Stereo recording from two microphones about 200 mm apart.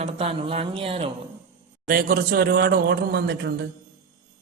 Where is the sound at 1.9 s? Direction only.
45° right (ahead or behind).